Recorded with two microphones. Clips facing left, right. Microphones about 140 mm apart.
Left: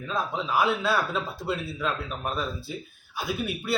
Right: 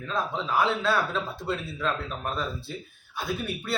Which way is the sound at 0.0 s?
5° left (ahead or behind).